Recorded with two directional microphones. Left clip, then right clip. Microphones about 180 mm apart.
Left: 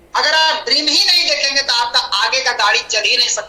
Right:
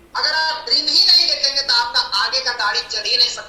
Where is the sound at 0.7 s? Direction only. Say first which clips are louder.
Right 1 dB; 90° left.